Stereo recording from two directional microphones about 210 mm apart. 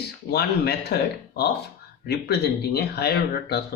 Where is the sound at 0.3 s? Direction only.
50° left (ahead or behind).